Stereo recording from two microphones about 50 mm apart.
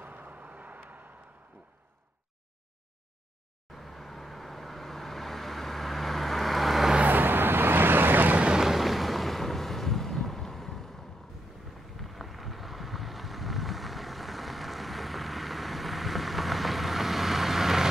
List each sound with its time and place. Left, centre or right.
0.0 s vehicle: right
3.7 s vehicle: centre
7.1 s vehicle: right
8.5 s wind noise: centre
12.0 s vehicle: centre